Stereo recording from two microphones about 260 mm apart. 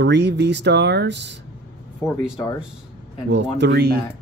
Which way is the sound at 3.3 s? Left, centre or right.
Right.